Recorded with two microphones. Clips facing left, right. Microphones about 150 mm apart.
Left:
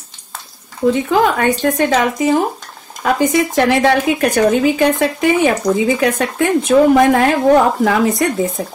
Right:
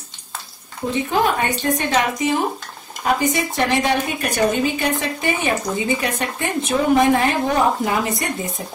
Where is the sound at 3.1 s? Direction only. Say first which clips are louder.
Left 10 dB; 90° left.